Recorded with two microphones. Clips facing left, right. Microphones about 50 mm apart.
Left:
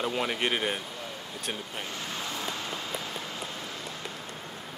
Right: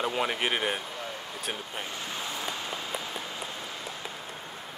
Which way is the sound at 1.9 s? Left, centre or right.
Right.